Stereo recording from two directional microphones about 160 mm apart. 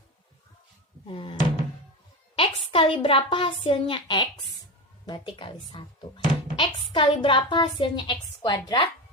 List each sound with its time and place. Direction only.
1.0 s a woman's voice: 35° left (ahead or behind)